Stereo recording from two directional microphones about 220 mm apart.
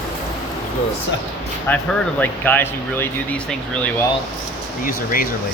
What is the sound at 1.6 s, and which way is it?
Speech, 5° left (ahead or behind).